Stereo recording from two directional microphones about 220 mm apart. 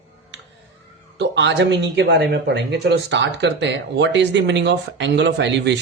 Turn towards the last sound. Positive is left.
turn(degrees=-50)  # may be behind; listen again after turning